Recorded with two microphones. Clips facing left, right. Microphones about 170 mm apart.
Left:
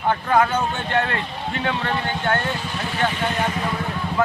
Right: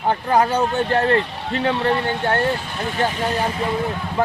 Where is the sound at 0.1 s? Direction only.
35° right (ahead or behind).